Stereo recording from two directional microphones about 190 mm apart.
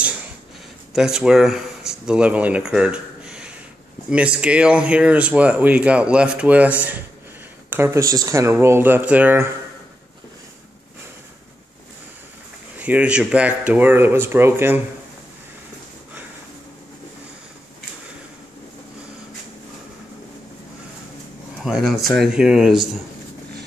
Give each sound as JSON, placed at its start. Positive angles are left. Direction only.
{"t": 0.9, "sound": "speech", "side_deg": 0}
{"t": 12.7, "sound": "speech", "side_deg": -10}
{"t": 21.6, "sound": "speech", "side_deg": 0}